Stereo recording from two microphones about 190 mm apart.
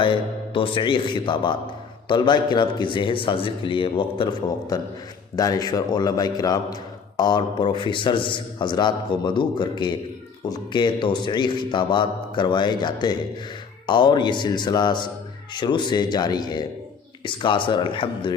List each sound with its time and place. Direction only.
0.0 s a man's voice: 25° left (ahead or behind)
5.4 s a man's voice: 20° left (ahead or behind)